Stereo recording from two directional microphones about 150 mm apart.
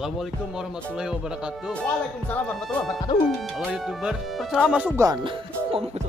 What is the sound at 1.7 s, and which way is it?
Speech, 10° left (ahead or behind).